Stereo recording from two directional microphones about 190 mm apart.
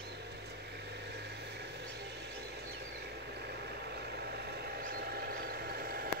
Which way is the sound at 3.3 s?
60° right (ahead or behind).